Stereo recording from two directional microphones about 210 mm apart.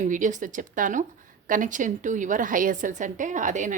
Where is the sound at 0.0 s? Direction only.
35° right (ahead or behind).